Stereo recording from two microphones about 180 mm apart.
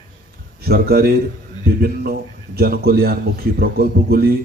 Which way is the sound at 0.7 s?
60° right (ahead or behind).